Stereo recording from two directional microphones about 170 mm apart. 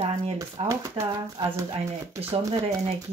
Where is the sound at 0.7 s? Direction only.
20° right (ahead or behind).